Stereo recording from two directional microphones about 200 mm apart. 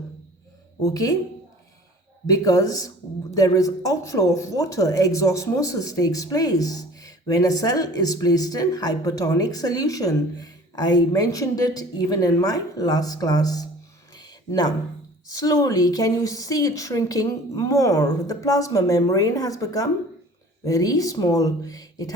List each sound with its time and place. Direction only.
0.8 s speech: 15° left (ahead or behind)
2.3 s speech: 15° left (ahead or behind)
14.2 s a sound: 20° left (ahead or behind)
15.3 s speech: 15° left (ahead or behind)